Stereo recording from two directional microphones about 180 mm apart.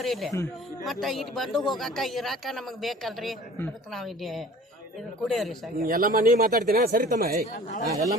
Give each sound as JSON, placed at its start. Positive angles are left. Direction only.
{"t": 0.0, "sound": "speech", "side_deg": 0}
{"t": 5.8, "sound": "speech", "side_deg": -55}
{"t": 7.5, "sound": "speech", "side_deg": 45}
{"t": 7.9, "sound": "a man's voice", "side_deg": -20}